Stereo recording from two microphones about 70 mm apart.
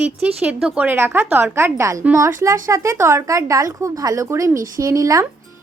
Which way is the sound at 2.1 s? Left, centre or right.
Right.